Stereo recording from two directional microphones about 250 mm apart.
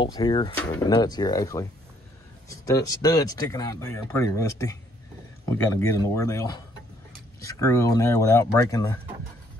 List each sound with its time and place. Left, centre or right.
0.0 s speech: centre
0.6 s speech: centre